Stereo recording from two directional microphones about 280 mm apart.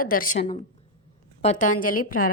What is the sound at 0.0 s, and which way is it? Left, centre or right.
A woman's voice, left.